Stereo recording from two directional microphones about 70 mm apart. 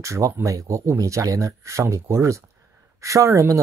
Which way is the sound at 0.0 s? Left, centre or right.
Right.